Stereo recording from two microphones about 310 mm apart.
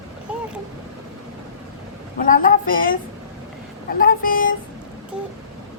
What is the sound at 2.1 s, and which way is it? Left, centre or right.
A woman's voice, left.